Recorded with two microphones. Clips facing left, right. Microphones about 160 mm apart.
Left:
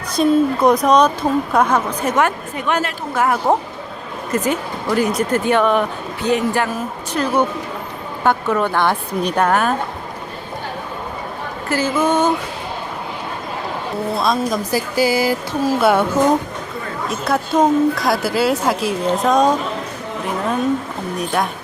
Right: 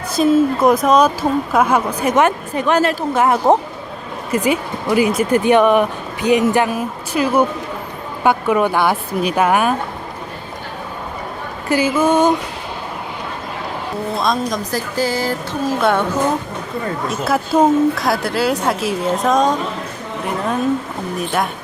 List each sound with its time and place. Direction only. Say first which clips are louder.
0.2 s speech: right 1 dB; centre (ahead or behind)
2.6 s speech: right 5 dB; 35° right (ahead or behind)
3.2 s a woman's voice: right 2 dB; 20° right (ahead or behind)
11.7 s speech: right 3 dB; 10° right (ahead or behind)
14.2 s speech: even; centre (ahead or behind)
17.1 s speech: even; 5° right (ahead or behind)